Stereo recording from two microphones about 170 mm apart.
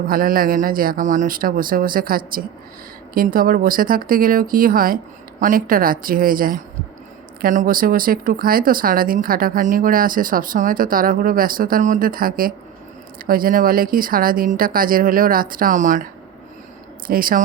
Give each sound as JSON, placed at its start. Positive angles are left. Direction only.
{"t": 0.1, "sound": "speech", "side_deg": -55}
{"t": 17.1, "sound": "speech", "side_deg": -55}